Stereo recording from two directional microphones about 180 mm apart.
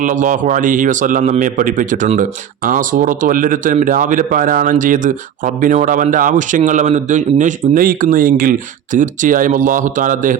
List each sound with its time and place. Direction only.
0.0 s speech: 45° right (ahead or behind)